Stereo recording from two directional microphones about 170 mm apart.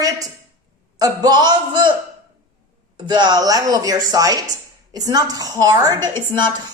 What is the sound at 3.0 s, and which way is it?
A woman's voice, 25° right (ahead or behind).